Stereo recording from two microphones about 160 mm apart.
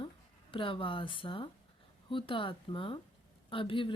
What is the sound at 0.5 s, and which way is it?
A woman's voice, 30° left (ahead or behind).